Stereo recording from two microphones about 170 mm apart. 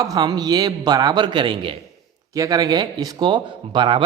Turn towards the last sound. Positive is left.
turn(degrees=-30)  # may be behind; listen again after turning